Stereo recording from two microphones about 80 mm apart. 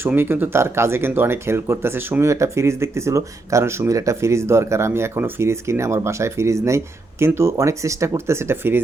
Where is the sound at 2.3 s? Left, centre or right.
Right.